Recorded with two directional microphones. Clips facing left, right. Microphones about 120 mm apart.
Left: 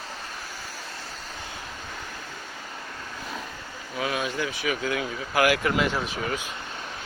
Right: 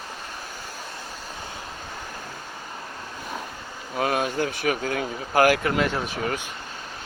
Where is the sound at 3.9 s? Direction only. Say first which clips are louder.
Right 4 dB; 50° right (ahead or behind).